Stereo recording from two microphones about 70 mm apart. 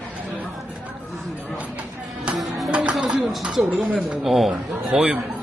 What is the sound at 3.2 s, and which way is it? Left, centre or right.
Speech, centre.